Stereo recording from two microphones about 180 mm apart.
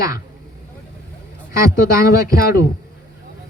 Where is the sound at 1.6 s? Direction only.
15° right (ahead or behind).